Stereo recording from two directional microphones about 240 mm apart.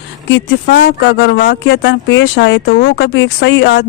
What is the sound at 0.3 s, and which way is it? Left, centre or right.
Speech, left.